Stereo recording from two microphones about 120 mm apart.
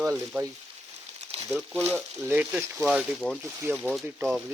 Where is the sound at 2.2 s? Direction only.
15° right (ahead or behind).